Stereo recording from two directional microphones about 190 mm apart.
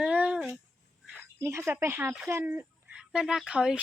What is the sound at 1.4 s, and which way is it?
Speech, 15° right (ahead or behind).